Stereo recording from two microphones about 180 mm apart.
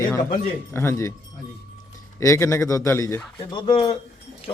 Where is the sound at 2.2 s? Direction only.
15° left (ahead or behind).